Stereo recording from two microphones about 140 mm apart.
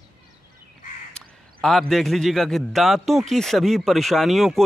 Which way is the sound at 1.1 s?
5° left (ahead or behind).